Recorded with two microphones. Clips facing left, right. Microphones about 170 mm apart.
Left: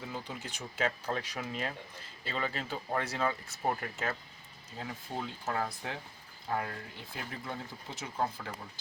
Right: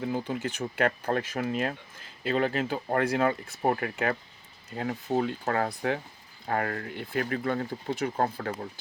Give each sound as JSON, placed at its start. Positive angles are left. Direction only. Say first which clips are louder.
{"t": 0.0, "sound": "speech", "louder": "right 11 dB", "side_deg": -55}